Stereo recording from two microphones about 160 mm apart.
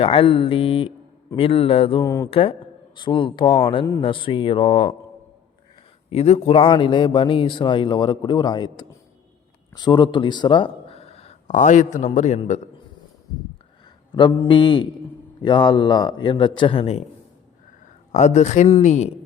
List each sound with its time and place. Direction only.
0.0 s a man's voice: 35° left (ahead or behind)
2.0 s speech: 20° left (ahead or behind)
2.3 s a man's voice: 35° left (ahead or behind)
6.1 s a man's voice: 45° left (ahead or behind)
14.1 s speech: 30° left (ahead or behind)
18.1 s a man's voice: 45° left (ahead or behind)